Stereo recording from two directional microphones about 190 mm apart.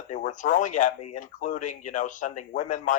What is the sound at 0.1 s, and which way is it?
A man's voice, 40° left (ahead or behind).